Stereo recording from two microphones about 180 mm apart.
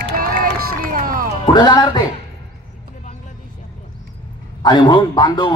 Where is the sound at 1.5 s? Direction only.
25° left (ahead or behind).